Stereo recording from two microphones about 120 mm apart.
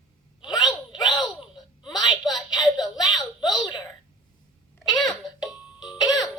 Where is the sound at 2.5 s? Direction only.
35° left (ahead or behind).